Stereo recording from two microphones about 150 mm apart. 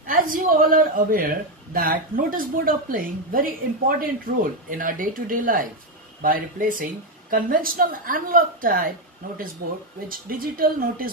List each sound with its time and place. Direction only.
0.0 s a man's voice: 65° right (ahead or behind)
10.0 s a man's voice: 75° right (ahead or behind)